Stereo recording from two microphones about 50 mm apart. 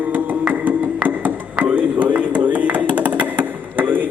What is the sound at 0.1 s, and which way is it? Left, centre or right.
Music, right.